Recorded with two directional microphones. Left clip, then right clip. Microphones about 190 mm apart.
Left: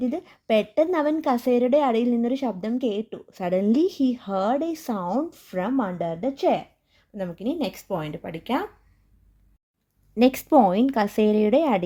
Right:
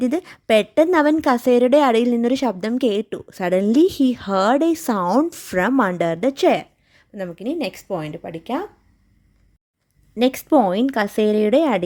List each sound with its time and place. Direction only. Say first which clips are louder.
0.0 s a woman's voice: right 6 dB; 30° right (ahead or behind)
10.2 s a woman's voice: right 1 dB; 5° right (ahead or behind)